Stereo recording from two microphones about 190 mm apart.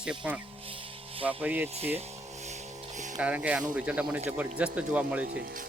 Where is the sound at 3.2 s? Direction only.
5° right (ahead or behind).